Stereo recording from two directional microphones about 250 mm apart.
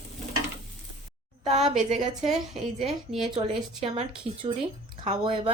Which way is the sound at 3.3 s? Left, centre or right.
Right.